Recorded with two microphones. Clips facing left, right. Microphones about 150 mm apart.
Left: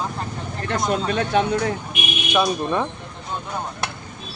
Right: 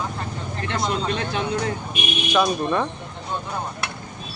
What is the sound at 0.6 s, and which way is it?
Speech, 50° left (ahead or behind).